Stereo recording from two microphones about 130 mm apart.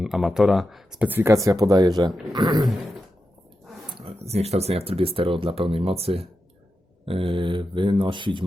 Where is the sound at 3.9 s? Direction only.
50° right (ahead or behind).